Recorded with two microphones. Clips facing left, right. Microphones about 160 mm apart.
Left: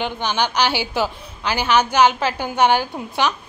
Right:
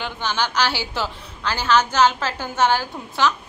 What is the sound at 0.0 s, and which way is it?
A woman's voice, 15° left (ahead or behind).